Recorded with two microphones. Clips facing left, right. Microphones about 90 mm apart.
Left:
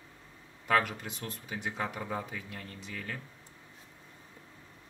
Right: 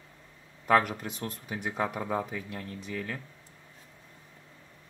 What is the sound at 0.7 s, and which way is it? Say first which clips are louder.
Speech: right 4 dB; 5° right (ahead or behind).